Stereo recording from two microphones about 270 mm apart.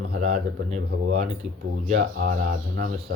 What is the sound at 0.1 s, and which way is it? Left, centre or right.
Speech, right.